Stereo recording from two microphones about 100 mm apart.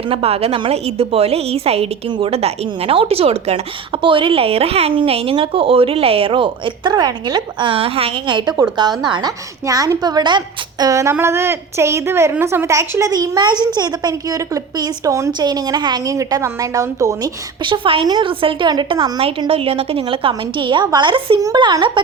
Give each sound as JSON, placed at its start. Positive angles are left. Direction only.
{"t": 0.1, "sound": "a woman's voice", "side_deg": -75}
{"t": 2.0, "sound": "speech", "side_deg": -55}
{"t": 2.3, "sound": "a woman's voice", "side_deg": -80}
{"t": 9.6, "sound": "a woman's voice", "side_deg": -35}
{"t": 15.3, "sound": "speech", "side_deg": -45}
{"t": 16.0, "sound": "a woman's voice", "side_deg": -30}
{"t": 17.6, "sound": "a woman's voice", "side_deg": -60}
{"t": 18.0, "sound": "speech", "side_deg": -50}
{"t": 18.7, "sound": "speech", "side_deg": -50}
{"t": 19.5, "sound": "a woman's voice", "side_deg": -70}